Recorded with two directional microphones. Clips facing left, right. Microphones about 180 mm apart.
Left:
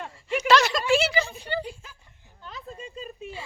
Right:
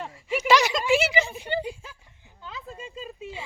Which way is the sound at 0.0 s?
5° right (ahead or behind).